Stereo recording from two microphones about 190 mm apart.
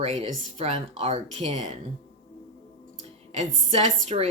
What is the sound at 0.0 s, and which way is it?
Speech, 35° right (ahead or behind).